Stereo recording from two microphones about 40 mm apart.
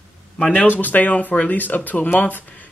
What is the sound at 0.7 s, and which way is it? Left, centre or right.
Speech, left.